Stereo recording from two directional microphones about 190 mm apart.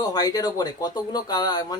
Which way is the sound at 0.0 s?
20° left (ahead or behind).